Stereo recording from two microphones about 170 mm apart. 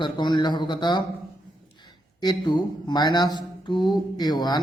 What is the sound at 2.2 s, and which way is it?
Speech, 25° left (ahead or behind).